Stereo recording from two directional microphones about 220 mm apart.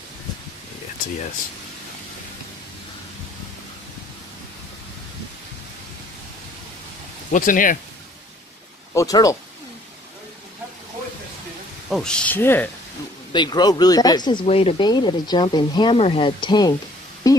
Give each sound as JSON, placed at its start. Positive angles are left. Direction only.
{"t": 7.3, "sound": "speech", "side_deg": 35}
{"t": 8.9, "sound": "speech", "side_deg": 15}
{"t": 11.9, "sound": "speech", "side_deg": 5}
{"t": 13.3, "sound": "speech", "side_deg": 20}
{"t": 17.3, "sound": "a sound", "side_deg": 15}